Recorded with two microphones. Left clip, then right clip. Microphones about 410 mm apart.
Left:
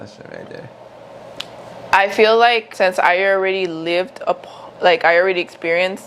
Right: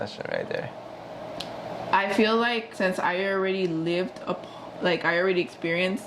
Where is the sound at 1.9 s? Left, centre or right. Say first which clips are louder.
Left 10 dB; left.